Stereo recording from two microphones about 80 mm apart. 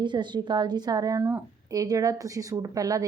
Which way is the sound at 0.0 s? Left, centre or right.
Right.